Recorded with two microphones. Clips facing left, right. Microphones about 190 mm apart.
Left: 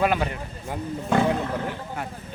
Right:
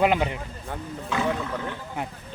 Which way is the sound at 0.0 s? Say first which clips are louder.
Right 1 dB; 20° right (ahead or behind).